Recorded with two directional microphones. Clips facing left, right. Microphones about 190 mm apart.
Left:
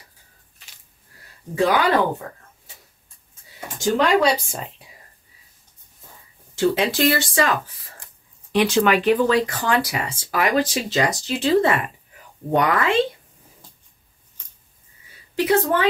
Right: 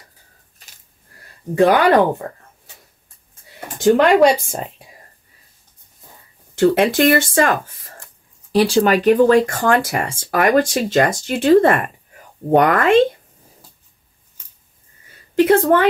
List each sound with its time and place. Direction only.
1.5 s speech: 55° right (ahead or behind)
3.5 s speech: 55° right (ahead or behind)
6.5 s speech: 55° right (ahead or behind)
8.5 s speech: 35° right (ahead or behind); by 13.0 s 50° right (ahead or behind)
15.3 s speech: 55° right (ahead or behind)